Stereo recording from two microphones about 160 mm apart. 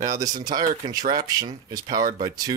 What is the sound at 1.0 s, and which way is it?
Speech, 60° right (ahead or behind).